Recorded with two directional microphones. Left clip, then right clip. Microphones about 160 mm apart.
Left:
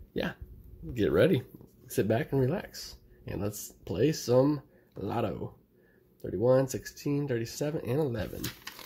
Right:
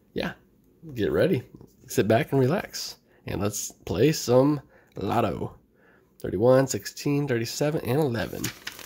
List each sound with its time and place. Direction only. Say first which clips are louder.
0.1 s speech: right 3 dB; 5° right (ahead or behind)
2.0 s speech: right 6 dB; 20° right (ahead or behind)